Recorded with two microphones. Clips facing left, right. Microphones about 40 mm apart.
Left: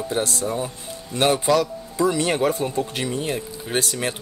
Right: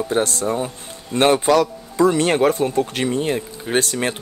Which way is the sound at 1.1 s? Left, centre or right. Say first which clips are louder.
Right 4 dB; right.